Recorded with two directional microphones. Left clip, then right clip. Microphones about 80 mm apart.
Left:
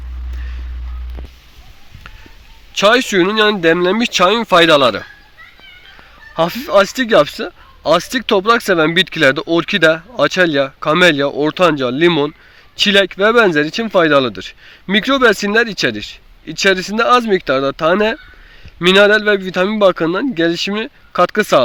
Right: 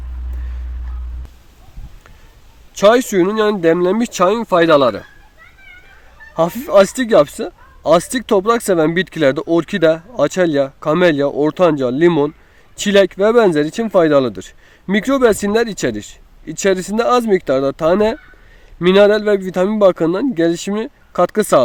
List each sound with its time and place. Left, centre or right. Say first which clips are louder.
2.9 s speech: left 1 dB; right
3.6 s speech: left 1 dB; centre
3.8 s speech: left 2 dB; right
4.2 s speech: left 3 dB; centre
6.3 s speech: right 1 dB; right
19.4 s speech: even; right